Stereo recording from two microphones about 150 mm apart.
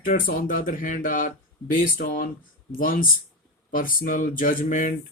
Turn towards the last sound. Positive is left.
turn(degrees=60)  # may be behind; listen again after turning